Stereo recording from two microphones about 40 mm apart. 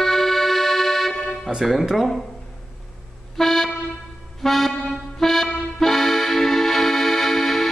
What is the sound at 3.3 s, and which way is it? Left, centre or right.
Music, centre.